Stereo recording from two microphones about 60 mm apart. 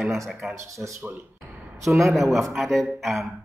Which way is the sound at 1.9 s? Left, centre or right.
Centre.